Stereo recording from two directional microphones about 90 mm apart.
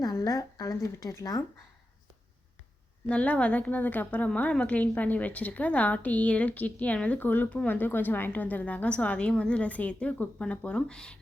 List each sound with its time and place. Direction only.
0.0 s speech: 45° left (ahead or behind)
3.1 s a woman's voice: 15° left (ahead or behind)